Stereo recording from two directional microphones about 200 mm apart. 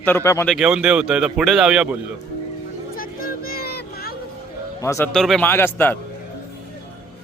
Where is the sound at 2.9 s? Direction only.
45° left (ahead or behind).